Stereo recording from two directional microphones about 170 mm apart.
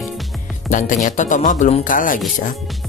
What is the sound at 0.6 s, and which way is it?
Speech, 50° left (ahead or behind).